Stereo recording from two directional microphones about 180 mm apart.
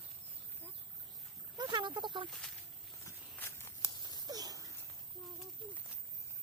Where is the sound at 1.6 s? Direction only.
25° right (ahead or behind).